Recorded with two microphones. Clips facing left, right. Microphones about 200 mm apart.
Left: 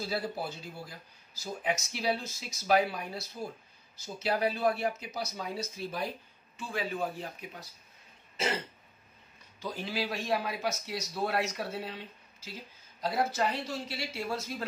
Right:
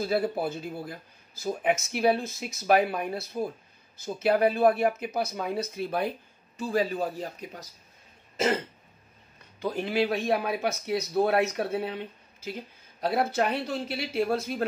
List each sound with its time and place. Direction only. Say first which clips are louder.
0.0 s speech: right 8 dB; 55° right (ahead or behind)
6.5 s speech: right 8 dB; 40° right (ahead or behind)
9.6 s speech: right 8 dB; 60° right (ahead or behind)